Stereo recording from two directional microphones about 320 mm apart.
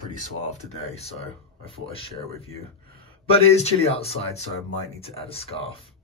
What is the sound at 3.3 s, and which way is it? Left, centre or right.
Speech, centre.